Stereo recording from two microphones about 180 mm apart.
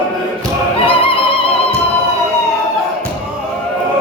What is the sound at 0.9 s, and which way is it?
Music, 30° left (ahead or behind).